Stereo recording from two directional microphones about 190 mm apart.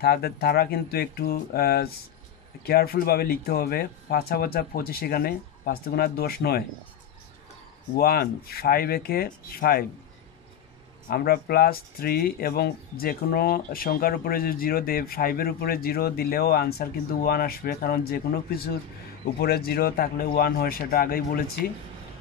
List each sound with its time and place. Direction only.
0.0 s speech: 55° left (ahead or behind)
7.9 s speech: 55° left (ahead or behind)
11.1 s speech: 55° left (ahead or behind)